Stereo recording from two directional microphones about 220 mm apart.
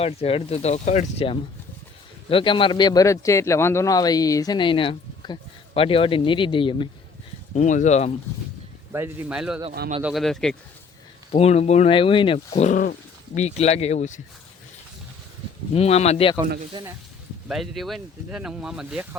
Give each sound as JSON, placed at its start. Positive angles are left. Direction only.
{"t": 0.0, "sound": "a man's voice", "side_deg": 25}
{"t": 7.5, "sound": "speech", "side_deg": 35}
{"t": 8.9, "sound": "speech", "side_deg": -10}
{"t": 11.3, "sound": "a man's voice", "side_deg": 30}
{"t": 15.7, "sound": "a man's voice", "side_deg": 30}
{"t": 16.7, "sound": "speech", "side_deg": -20}
{"t": 17.5, "sound": "speech", "side_deg": 0}